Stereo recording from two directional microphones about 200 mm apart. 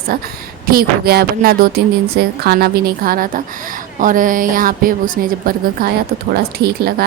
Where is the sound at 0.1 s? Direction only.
45° right (ahead or behind).